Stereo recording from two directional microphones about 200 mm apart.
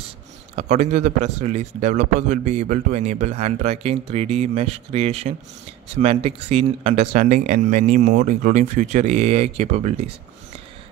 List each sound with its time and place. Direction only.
0.6 s speech: 35° right (ahead or behind)